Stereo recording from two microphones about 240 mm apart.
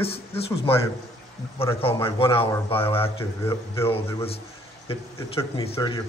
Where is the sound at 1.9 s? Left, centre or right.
Left.